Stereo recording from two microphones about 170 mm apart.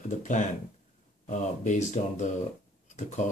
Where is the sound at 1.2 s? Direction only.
45° left (ahead or behind).